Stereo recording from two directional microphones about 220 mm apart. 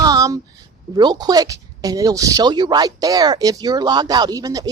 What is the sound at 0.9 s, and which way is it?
Speech, 20° right (ahead or behind).